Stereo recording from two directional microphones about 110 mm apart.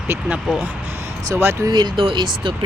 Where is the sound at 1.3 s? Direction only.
30° right (ahead or behind).